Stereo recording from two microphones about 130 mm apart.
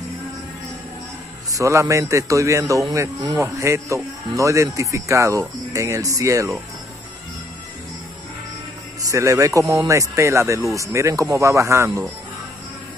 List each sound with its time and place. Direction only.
1.5 s speech: 25° right (ahead or behind)
9.0 s speech: 25° right (ahead or behind)